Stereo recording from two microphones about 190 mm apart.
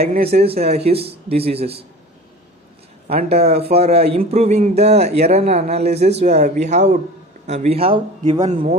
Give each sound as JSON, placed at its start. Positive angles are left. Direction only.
{"t": 0.3, "sound": "speech", "side_deg": -30}
{"t": 3.2, "sound": "speech", "side_deg": -35}